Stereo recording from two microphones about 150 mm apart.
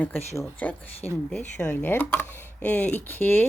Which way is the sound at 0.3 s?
15° left (ahead or behind).